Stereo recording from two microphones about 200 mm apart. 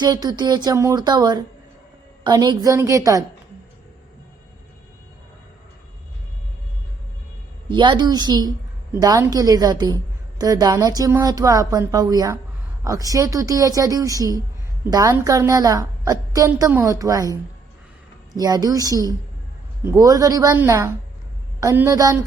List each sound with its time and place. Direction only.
0.0 s a woman's voice: 20° right (ahead or behind)
7.7 s a woman's voice: 20° right (ahead or behind)
18.3 s a woman's voice: 20° right (ahead or behind)